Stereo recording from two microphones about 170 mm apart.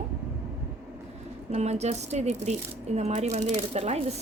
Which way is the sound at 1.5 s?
40° right (ahead or behind).